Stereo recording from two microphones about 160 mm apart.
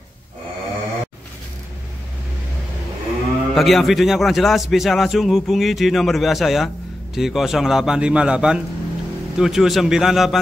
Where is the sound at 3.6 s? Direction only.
Centre (ahead or behind).